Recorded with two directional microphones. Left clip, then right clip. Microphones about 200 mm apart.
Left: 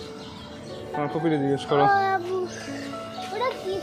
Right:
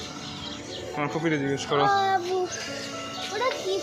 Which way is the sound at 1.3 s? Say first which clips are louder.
Left 4 dB; 35° left (ahead or behind).